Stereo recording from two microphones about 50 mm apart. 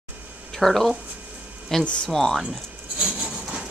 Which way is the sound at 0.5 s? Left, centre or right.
Centre.